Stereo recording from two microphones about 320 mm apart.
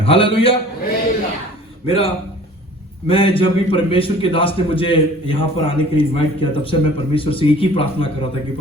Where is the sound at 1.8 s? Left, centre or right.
Centre.